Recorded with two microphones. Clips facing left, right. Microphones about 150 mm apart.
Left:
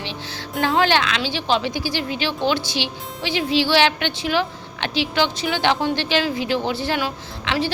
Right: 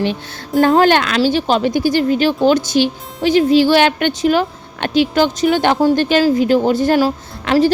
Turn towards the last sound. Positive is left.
turn(degrees=-45)  # may be behind; listen again after turning